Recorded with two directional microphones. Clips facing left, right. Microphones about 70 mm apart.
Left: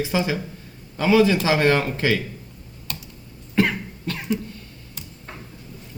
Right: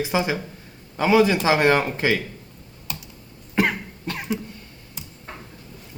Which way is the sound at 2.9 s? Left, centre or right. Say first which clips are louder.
Even; centre.